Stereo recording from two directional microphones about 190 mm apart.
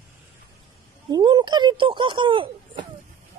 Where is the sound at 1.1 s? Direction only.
20° right (ahead or behind).